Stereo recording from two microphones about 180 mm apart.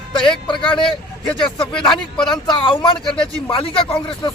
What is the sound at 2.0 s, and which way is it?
Speech, 25° left (ahead or behind).